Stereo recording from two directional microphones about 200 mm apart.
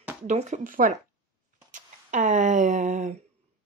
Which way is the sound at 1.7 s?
40° right (ahead or behind).